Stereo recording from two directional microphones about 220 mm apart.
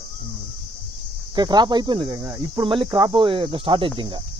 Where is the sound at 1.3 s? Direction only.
20° right (ahead or behind).